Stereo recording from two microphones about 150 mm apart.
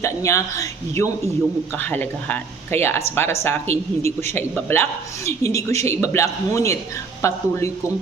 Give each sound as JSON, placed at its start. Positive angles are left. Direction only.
{"t": 0.0, "sound": "speech", "side_deg": 20}